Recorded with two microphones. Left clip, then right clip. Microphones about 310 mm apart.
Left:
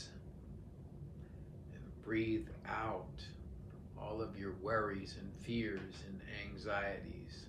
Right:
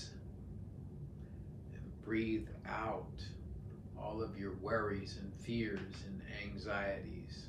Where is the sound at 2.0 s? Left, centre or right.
Centre.